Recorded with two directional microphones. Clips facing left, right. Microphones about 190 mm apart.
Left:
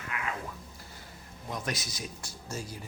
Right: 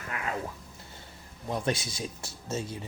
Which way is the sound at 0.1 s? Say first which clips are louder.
Right 1 dB; 40° right (ahead or behind).